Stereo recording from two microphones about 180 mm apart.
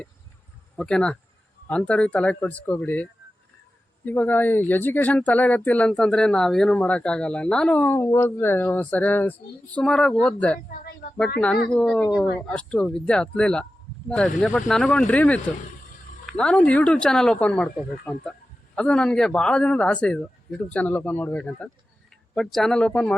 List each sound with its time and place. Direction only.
0.8 s speech: 5° left (ahead or behind)
10.7 s a sound: 50° left (ahead or behind)
11.3 s speech: 5° left (ahead or behind)